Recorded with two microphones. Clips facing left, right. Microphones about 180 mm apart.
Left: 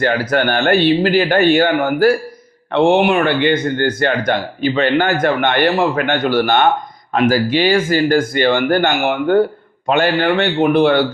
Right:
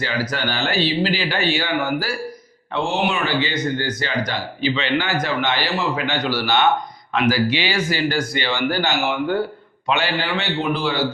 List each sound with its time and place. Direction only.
0.0 s speech: 55° left (ahead or behind)